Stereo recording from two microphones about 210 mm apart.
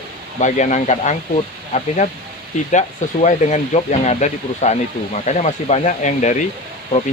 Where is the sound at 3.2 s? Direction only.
35° left (ahead or behind).